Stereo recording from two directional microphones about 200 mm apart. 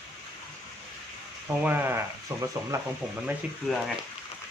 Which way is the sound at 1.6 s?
10° right (ahead or behind).